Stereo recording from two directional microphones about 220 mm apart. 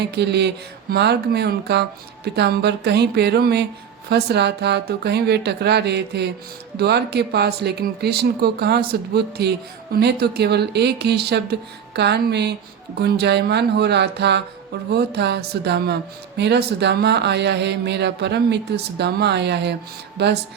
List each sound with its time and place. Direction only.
0.0 s speech: 50° right (ahead or behind)